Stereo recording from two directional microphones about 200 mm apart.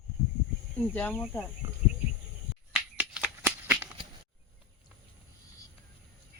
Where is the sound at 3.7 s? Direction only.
5° right (ahead or behind).